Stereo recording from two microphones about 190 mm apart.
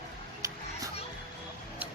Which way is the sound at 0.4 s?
15° right (ahead or behind).